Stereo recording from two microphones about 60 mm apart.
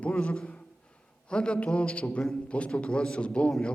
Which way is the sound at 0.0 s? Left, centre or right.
Centre.